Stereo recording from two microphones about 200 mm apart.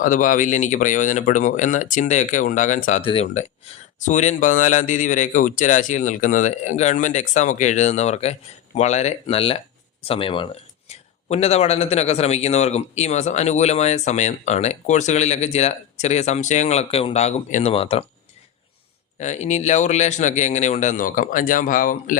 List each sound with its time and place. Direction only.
0.0 s speech: 40° left (ahead or behind)
3.0 s speech: 30° left (ahead or behind)
19.2 s speech: 35° left (ahead or behind)